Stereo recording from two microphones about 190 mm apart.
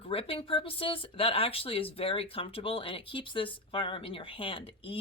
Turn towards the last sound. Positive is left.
turn(degrees=30)  # may be behind; listen again after turning